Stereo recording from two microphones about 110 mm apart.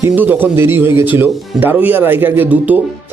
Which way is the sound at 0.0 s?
15° right (ahead or behind).